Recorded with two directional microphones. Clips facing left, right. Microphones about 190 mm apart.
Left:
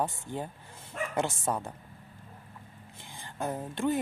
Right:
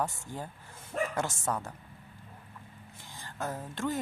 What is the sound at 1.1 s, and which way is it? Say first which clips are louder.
Speech: left 2 dB; 20° left (ahead or behind).